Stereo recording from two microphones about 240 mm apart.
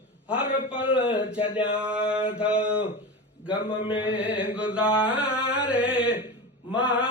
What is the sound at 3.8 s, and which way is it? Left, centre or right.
Mantra, left.